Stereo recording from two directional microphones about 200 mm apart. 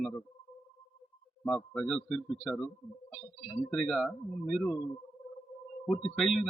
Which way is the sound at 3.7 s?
Centre (ahead or behind).